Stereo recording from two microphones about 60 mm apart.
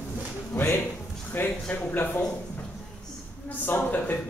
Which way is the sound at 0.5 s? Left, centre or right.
Left.